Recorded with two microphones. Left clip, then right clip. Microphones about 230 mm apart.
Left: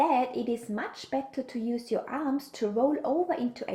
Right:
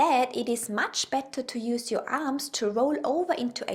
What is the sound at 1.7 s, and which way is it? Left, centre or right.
A woman's voice, right.